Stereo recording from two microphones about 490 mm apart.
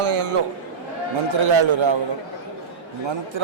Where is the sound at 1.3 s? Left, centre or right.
Right.